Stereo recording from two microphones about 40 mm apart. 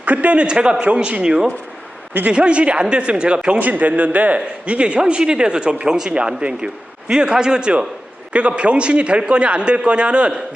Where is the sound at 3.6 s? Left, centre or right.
Right.